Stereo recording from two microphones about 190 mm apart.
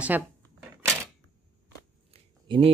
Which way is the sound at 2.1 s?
30° right (ahead or behind).